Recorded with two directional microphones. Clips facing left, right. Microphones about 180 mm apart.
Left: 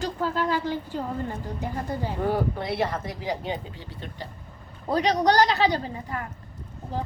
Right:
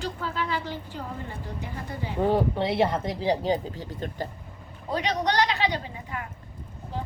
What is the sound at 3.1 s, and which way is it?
Speech, 35° right (ahead or behind).